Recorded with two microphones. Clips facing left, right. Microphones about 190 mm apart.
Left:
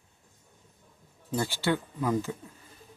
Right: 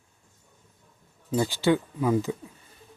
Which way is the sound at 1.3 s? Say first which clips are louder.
Right 5 dB; 15° right (ahead or behind).